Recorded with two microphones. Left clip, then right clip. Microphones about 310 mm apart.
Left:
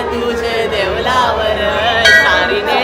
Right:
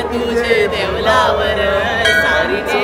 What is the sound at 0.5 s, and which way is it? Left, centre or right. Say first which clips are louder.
Music: right 2 dB; centre.